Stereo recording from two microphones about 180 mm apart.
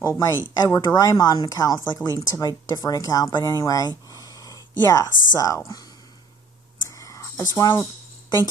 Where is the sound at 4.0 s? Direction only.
20° left (ahead or behind).